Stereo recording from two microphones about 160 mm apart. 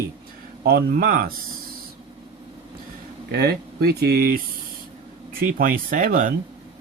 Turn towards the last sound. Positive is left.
turn(degrees=-60)  # may be behind; listen again after turning